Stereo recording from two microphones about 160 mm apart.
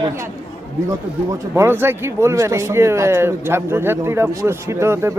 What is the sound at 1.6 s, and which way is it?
Speech, 15° right (ahead or behind).